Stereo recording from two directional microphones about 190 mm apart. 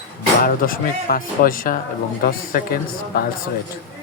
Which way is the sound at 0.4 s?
50° left (ahead or behind).